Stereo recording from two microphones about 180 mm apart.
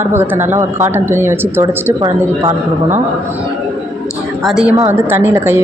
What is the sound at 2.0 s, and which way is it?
Speech, 25° right (ahead or behind).